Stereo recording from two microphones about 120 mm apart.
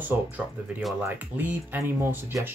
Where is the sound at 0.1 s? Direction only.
15° right (ahead or behind).